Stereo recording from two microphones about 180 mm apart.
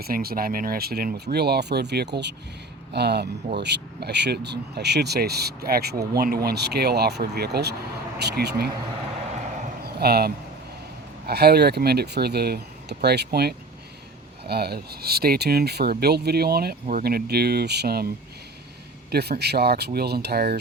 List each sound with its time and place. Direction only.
0.0 s speech: 55° right (ahead or behind)
9.8 s a sound: 60° right (ahead or behind)
11.3 s speech: 60° right (ahead or behind)
19.1 s speech: 65° right (ahead or behind)